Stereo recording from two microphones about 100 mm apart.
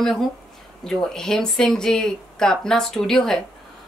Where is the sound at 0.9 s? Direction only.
5° left (ahead or behind).